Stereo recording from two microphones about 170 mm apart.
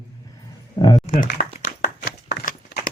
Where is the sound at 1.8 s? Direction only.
80° left.